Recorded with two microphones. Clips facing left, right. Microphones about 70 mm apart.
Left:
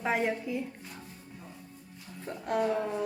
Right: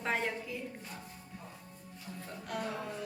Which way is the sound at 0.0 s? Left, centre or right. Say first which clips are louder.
Left 5 dB; centre.